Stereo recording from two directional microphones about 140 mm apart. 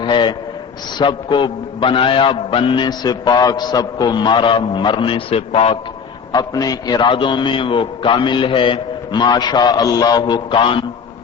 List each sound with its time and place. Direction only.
0.0 s a sound: 35° left (ahead or behind)
0.9 s a man's voice: 35° left (ahead or behind)
6.3 s a man's voice: 25° left (ahead or behind)